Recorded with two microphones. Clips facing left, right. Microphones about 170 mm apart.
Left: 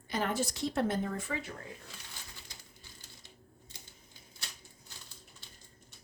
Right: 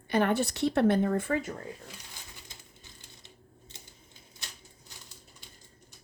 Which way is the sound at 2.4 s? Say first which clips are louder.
Right 2 dB; 20° right (ahead or behind).